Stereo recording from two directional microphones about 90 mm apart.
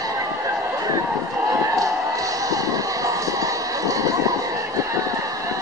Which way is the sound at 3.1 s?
40° right (ahead or behind).